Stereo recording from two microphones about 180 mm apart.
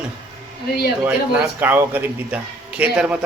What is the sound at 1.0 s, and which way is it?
A man's voice, 10° right (ahead or behind).